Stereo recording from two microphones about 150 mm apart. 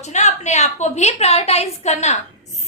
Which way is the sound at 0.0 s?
50° left (ahead or behind).